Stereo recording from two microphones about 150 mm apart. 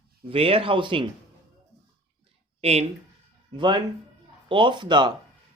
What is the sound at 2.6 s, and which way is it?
Speech, 45° right (ahead or behind).